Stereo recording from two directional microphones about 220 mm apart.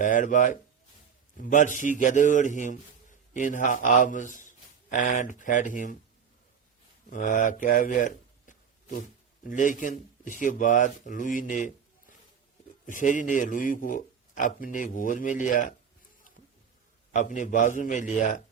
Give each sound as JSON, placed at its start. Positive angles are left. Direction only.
{"t": 0.0, "sound": "a man's voice", "side_deg": 35}
{"t": 7.1, "sound": "a man's voice", "side_deg": 35}
{"t": 12.8, "sound": "a man's voice", "side_deg": 35}
{"t": 17.1, "sound": "a man's voice", "side_deg": 35}